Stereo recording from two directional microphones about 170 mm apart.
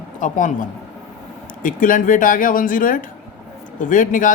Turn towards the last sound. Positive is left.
turn(degrees=50)  # may be behind; listen again after turning